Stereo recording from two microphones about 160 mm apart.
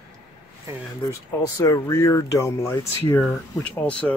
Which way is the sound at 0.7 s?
20° right (ahead or behind).